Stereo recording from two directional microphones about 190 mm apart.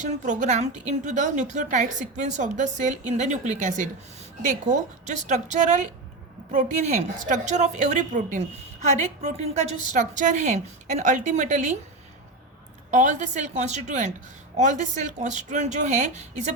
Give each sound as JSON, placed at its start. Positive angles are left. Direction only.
{"t": 0.0, "sound": "a woman's voice", "side_deg": -40}
{"t": 12.9, "sound": "a woman's voice", "side_deg": -40}